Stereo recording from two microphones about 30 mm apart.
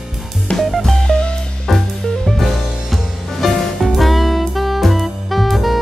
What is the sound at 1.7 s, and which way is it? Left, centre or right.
Music, centre.